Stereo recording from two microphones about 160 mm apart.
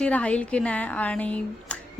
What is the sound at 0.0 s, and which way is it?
Speech, 5° left (ahead or behind).